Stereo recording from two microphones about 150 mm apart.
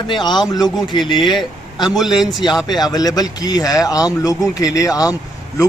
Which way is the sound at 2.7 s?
25° left (ahead or behind).